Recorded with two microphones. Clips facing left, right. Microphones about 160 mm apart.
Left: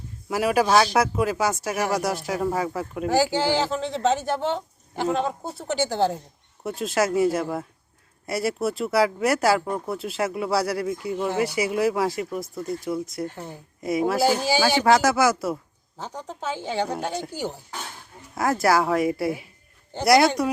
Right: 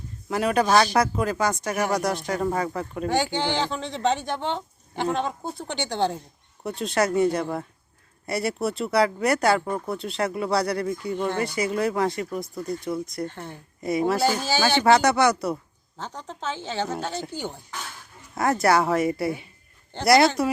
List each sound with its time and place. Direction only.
0.3 s a woman's voice: 5° left (ahead or behind)